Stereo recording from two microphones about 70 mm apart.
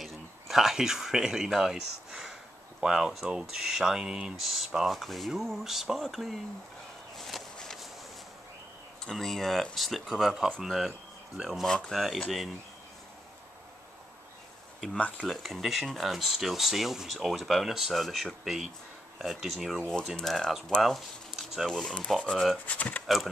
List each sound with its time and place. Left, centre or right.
0.0 s speech: centre
7.2 s walk: centre
7.5 s a sound: centre
9.0 s speech: centre
15.0 s speech: centre
15.2 s speech: centre
20.8 s speech: centre
22.7 s speech: left